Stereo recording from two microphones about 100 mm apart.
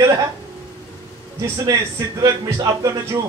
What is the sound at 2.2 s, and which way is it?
Speech, 35° right (ahead or behind).